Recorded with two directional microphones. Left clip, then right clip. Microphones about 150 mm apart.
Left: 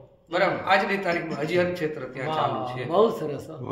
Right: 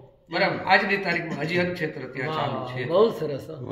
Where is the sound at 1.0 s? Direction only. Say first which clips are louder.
Even; 30° left (ahead or behind).